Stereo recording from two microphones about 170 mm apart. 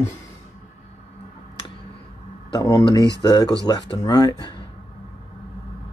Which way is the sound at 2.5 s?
20° left (ahead or behind).